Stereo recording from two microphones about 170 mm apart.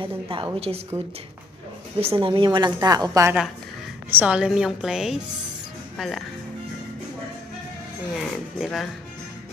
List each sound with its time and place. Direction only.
0.0 s a woman's voice: 30° right (ahead or behind)
0.9 s a woman's voice: 15° right (ahead or behind)
2.0 s a woman's voice: 35° right (ahead or behind)
4.1 s a woman's voice: 10° right (ahead or behind)
8.1 s a woman's voice: centre (ahead or behind)